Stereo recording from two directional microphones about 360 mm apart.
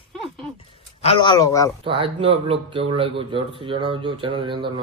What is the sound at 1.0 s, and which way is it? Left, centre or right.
Speech, centre.